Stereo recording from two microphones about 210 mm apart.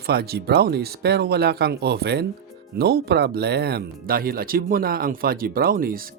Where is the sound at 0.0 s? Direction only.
50° right (ahead or behind).